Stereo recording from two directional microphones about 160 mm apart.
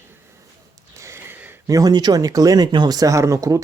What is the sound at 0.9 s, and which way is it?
Speech, 15° right (ahead or behind).